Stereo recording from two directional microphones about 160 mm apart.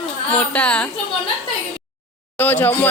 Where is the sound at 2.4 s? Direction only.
10° left (ahead or behind).